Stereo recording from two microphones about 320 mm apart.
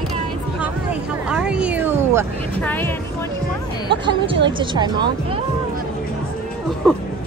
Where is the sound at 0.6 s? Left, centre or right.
Centre.